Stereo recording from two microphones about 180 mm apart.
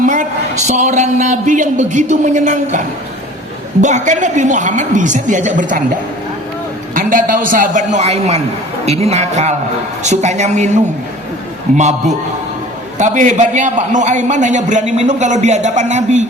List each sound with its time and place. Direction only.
0.0 s a woman's voice: 45° right (ahead or behind)
6.9 s a woman's voice: 50° right (ahead or behind)
11.8 s a man's voice: 40° right (ahead or behind)